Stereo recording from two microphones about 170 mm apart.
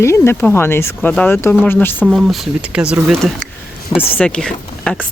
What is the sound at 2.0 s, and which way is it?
Speech, centre (ahead or behind).